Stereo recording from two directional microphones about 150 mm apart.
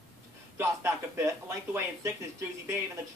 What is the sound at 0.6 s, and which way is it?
A man's voice, 20° right (ahead or behind).